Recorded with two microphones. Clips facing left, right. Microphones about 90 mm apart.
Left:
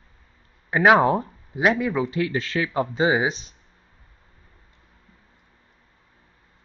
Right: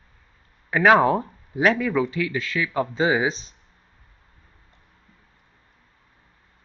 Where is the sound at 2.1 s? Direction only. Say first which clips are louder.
Left 2 dB; 40° left (ahead or behind).